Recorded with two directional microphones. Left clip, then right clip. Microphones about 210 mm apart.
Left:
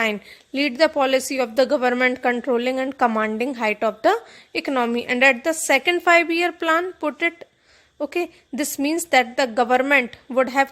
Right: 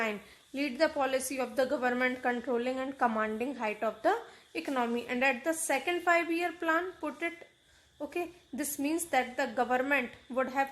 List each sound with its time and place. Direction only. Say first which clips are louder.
0.0 s a woman's voice: left 11 dB; 35° left (ahead or behind)